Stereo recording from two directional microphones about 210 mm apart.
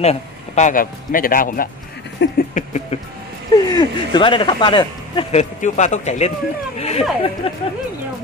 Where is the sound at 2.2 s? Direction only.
55° left (ahead or behind).